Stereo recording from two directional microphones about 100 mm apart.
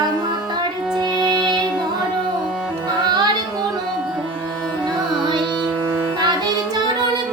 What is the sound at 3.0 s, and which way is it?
Music, 50° right (ahead or behind).